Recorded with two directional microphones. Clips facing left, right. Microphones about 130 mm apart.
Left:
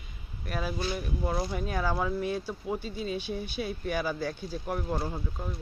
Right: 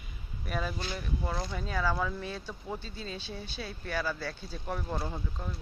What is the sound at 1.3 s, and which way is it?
Speech, 25° left (ahead or behind).